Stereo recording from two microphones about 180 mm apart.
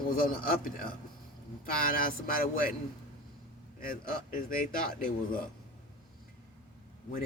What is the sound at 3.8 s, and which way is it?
Speech, 50° left (ahead or behind).